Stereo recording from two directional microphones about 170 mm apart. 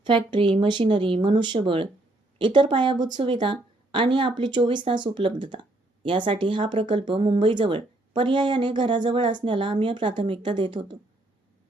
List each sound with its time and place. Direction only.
0.0 s speech: 30° right (ahead or behind)